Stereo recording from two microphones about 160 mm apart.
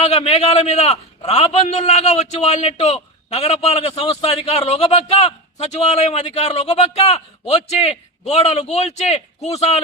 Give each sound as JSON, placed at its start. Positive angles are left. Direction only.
{"t": 0.0, "sound": "a man's voice", "side_deg": 40}